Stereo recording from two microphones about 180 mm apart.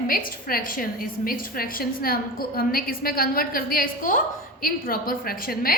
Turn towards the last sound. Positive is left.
turn(degrees=55)  # may be behind; listen again after turning